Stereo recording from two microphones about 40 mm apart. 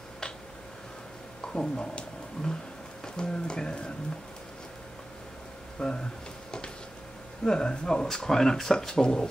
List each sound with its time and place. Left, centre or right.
1.4 s speech: left
5.8 s speech: left
7.4 s speech: left